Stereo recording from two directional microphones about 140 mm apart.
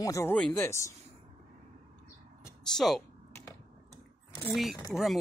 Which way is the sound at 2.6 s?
Centre (ahead or behind).